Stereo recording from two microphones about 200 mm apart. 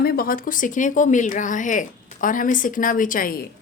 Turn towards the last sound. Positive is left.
turn(degrees=45)  # may be behind; listen again after turning